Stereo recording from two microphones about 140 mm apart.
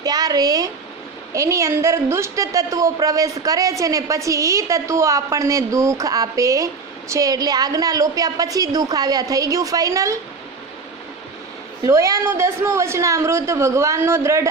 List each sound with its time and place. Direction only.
0.0 s a woman's voice: 30° right (ahead or behind)
11.9 s a woman's voice: 25° right (ahead or behind)